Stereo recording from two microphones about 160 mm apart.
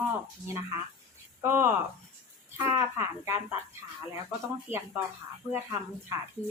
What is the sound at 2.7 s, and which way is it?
Speech, 20° right (ahead or behind).